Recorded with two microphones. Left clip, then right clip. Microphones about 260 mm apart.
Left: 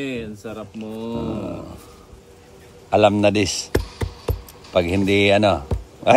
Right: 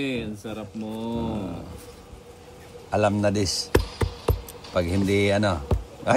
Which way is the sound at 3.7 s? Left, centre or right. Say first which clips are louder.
Right 1 dB; centre.